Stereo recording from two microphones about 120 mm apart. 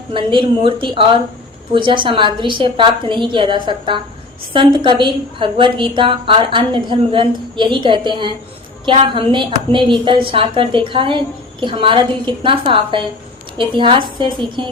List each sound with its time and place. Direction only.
0.1 s a woman's voice: 45° right (ahead or behind)